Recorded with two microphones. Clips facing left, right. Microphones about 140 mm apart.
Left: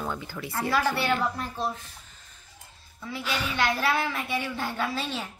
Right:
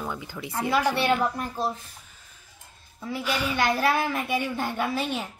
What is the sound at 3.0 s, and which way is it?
Speech, 10° right (ahead or behind).